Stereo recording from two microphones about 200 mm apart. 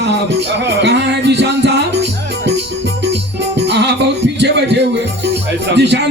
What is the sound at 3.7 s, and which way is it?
Music, 60° right (ahead or behind).